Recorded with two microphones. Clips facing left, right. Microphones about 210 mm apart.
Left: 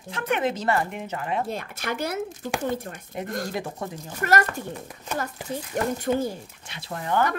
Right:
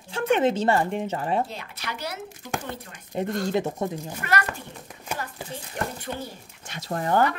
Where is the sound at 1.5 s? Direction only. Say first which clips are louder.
Left 6 dB; 50° left (ahead or behind).